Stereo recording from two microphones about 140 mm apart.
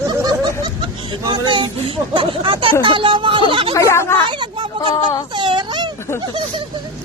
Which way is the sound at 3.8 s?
20° left (ahead or behind).